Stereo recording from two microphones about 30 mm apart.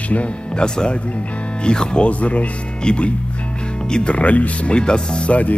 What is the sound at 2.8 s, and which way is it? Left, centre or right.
Speech, left.